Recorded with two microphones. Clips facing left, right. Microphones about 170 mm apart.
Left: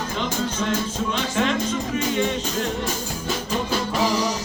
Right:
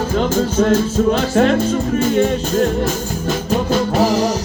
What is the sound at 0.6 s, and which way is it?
Music, 45° right (ahead or behind).